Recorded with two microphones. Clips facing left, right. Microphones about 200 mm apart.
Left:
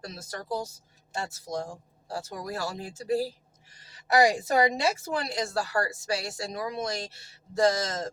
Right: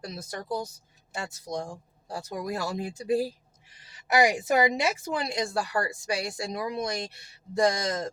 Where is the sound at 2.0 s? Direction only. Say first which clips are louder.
Right 2 dB; 15° right (ahead or behind).